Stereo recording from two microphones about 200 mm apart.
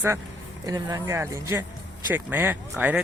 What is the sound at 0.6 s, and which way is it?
Speech, 20° right (ahead or behind).